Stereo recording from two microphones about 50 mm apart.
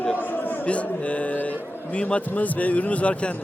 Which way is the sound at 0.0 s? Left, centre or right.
Left.